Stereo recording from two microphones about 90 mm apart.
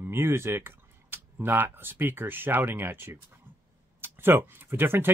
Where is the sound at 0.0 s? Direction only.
25° right (ahead or behind).